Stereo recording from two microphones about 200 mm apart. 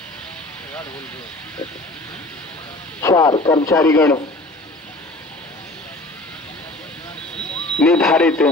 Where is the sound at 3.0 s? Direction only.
20° left (ahead or behind).